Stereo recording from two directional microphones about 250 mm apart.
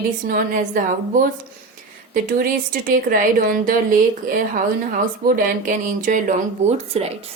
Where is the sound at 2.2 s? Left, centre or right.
Right.